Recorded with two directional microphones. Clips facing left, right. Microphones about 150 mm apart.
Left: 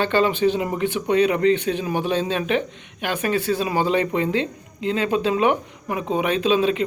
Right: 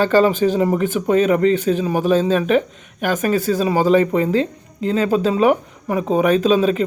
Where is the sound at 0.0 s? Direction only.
40° right (ahead or behind).